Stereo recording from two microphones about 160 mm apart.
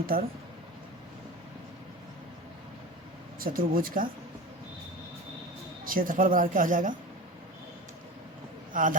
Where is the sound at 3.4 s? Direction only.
65° right (ahead or behind).